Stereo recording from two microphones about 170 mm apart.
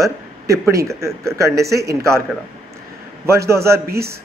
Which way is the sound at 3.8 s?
65° right (ahead or behind).